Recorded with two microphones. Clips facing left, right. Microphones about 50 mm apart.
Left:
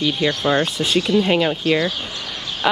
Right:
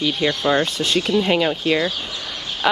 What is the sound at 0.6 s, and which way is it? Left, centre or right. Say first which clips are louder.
Speech: left 1 dB; centre.